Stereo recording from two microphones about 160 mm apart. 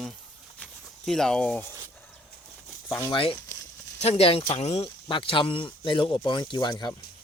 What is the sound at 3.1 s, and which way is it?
Speech, 35° left (ahead or behind).